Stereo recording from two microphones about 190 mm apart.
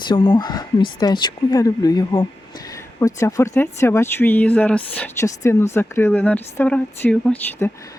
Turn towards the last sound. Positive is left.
turn(degrees=5)  # may be behind; listen again after turning